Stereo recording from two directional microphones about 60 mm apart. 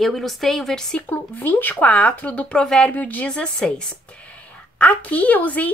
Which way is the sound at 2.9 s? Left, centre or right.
Left.